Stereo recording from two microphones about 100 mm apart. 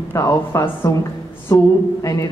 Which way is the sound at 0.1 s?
30° left (ahead or behind).